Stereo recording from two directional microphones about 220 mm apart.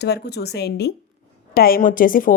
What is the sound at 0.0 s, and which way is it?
A woman's voice, 50° left (ahead or behind).